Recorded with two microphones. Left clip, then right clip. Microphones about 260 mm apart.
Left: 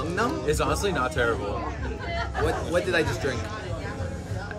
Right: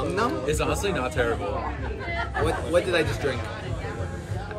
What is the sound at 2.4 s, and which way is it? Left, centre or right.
Speech, centre.